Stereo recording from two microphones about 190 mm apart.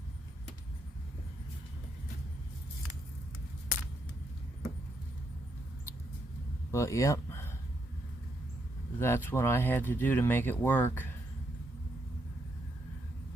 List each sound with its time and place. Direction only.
6.7 s speech: 15° left (ahead or behind)
9.0 s speech: 10° left (ahead or behind)